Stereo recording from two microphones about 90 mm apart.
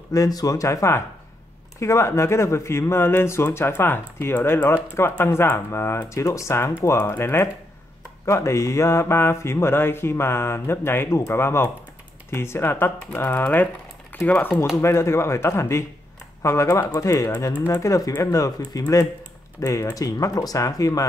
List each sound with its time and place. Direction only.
0.1 s speech: 40° left (ahead or behind)
3.4 s mantra: 25° left (ahead or behind)
6.0 s speech: 35° left (ahead or behind)
6.8 s mantra: 30° left (ahead or behind)
14.1 s speech: 20° left (ahead or behind)
14.8 s speech: 30° left (ahead or behind)